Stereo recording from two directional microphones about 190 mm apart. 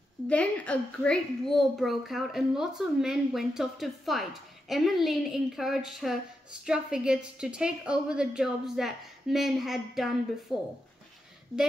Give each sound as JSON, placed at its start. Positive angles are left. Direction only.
{"t": 0.3, "sound": "a woman's voice", "side_deg": 5}